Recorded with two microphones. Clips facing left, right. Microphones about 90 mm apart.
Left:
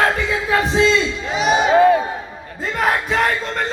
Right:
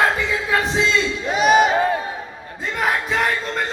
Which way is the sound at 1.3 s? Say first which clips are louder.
Right 2 dB; 45° right (ahead or behind).